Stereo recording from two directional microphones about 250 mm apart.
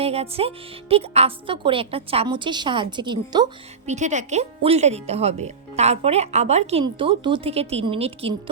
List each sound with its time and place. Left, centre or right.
0.0 s speech: right
3.8 s speech: right